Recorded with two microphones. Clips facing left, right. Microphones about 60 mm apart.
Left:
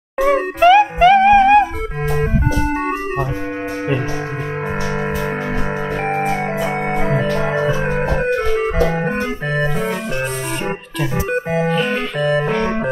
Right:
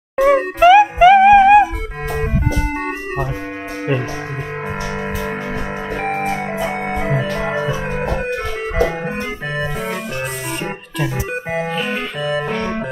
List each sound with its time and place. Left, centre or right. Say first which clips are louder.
0.2 s music: right 2 dB; centre
6.0 s music: left 1 dB; centre
7.4 s music: left 3 dB; centre
11.7 s organ: left 3 dB; centre